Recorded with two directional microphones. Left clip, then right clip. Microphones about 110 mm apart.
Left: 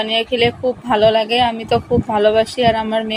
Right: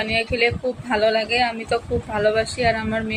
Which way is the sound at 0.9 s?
60° left (ahead or behind).